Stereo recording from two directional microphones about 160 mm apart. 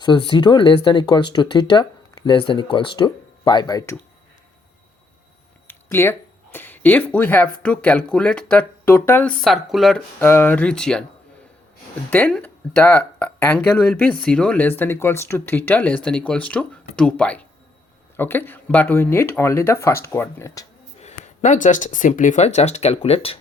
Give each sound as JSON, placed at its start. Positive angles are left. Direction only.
{"t": 0.0, "sound": "speech", "side_deg": 30}
{"t": 5.6, "sound": "a sound", "side_deg": 15}
{"t": 7.6, "sound": "speech", "side_deg": 10}
{"t": 9.4, "sound": "speech", "side_deg": 0}
{"t": 10.2, "sound": "speech", "side_deg": 15}
{"t": 12.1, "sound": "speech", "side_deg": 10}
{"t": 21.0, "sound": "speech", "side_deg": 45}